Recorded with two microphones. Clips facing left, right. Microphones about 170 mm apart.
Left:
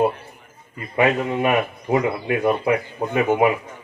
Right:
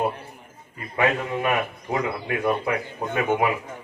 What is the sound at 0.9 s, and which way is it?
Speech, 20° left (ahead or behind).